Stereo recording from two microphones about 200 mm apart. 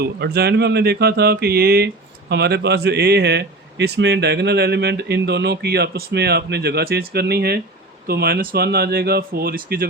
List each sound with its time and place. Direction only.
0.0 s a man's voice: 55° right (ahead or behind)